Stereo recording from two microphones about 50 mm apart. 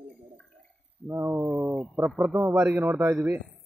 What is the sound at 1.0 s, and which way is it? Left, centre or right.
Wild animals, right.